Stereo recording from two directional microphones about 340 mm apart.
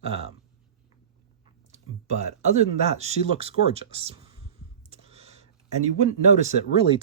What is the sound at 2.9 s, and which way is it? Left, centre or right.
Speech, centre.